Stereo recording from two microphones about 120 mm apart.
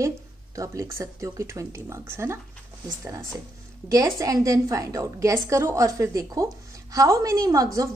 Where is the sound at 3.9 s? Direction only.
30° right (ahead or behind).